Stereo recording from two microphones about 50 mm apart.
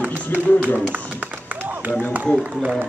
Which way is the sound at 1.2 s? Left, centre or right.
Right.